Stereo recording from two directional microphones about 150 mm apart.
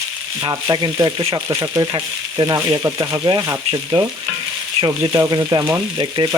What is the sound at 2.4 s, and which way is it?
Frying, 25° right (ahead or behind).